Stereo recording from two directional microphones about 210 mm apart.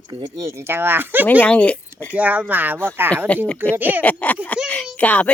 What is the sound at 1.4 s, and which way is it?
Speech, 5° left (ahead or behind).